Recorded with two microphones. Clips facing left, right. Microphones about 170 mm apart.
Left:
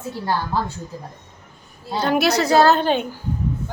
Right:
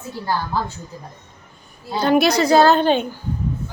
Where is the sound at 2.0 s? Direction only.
5° left (ahead or behind).